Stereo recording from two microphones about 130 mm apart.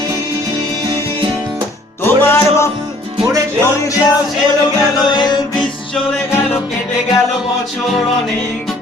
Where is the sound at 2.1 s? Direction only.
20° left (ahead or behind).